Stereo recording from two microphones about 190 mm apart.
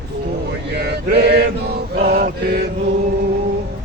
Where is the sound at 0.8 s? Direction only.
60° right (ahead or behind).